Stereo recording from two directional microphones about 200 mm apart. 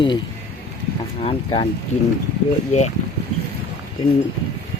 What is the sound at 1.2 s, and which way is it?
Speech, 30° left (ahead or behind).